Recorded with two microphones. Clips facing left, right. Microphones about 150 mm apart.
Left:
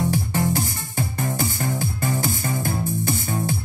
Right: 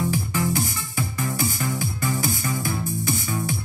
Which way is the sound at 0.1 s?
65° left (ahead or behind).